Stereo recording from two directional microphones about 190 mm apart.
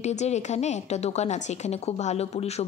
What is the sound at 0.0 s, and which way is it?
A woman's voice, 35° left (ahead or behind).